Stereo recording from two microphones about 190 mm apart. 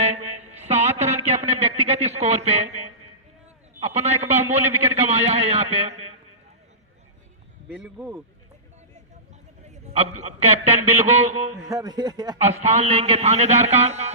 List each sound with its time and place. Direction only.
0.0 s mantra: 35° right (ahead or behind)
1.3 s a man's voice: 35° right (ahead or behind)
4.3 s speech: 10° right (ahead or behind)
4.8 s a man's voice: 35° right (ahead or behind)
7.7 s speech: 10° right (ahead or behind)
9.6 s a man's voice: 35° right (ahead or behind)
11.7 s a man's voice: 20° right (ahead or behind)
12.4 s a man's voice: 35° right (ahead or behind)